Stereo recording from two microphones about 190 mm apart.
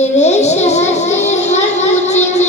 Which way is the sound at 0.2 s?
35° left (ahead or behind).